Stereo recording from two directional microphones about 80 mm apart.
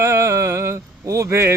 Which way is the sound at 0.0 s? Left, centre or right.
Right.